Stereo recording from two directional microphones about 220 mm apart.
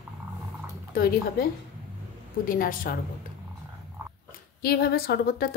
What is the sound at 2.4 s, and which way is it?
Speech, 40° left (ahead or behind).